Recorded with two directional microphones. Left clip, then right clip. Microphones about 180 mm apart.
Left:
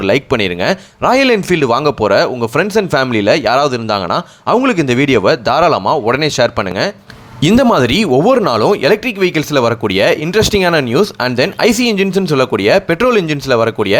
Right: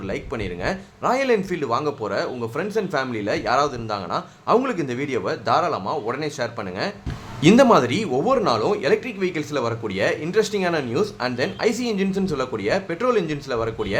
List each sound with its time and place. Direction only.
0.0 s speech: 50° left (ahead or behind)